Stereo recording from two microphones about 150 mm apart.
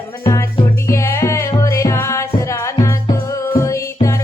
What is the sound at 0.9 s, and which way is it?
Music, 20° left (ahead or behind).